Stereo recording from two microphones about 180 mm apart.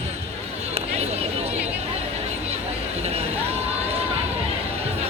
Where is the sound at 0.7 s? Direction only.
35° right (ahead or behind).